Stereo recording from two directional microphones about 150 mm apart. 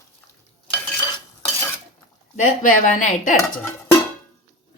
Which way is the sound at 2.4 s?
60° left (ahead or behind).